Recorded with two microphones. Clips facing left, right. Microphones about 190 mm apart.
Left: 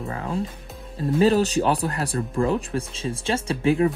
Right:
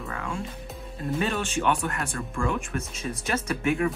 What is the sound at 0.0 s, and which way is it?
Speech, 35° left (ahead or behind).